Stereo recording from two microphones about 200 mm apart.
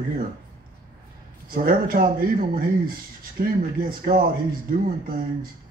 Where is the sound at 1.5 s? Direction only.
45° right (ahead or behind).